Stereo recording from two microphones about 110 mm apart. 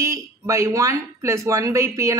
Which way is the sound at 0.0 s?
25° right (ahead or behind).